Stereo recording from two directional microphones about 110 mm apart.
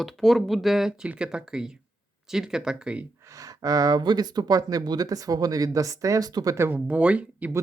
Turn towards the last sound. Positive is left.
turn(degrees=-10)  # may be behind; listen again after turning